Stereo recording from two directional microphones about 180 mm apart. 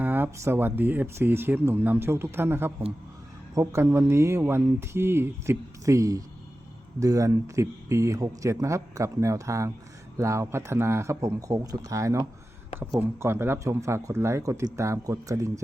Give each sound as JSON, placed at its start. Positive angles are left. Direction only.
{"t": 0.0, "sound": "speech", "side_deg": -10}